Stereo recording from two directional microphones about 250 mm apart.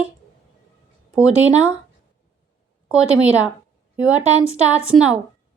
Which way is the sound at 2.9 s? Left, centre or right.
Centre.